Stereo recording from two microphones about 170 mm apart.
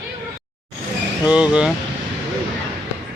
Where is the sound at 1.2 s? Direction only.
5° right (ahead or behind).